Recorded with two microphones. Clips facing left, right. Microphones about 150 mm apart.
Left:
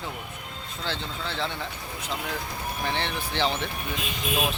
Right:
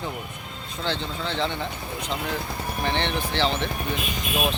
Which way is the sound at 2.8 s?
5° left (ahead or behind).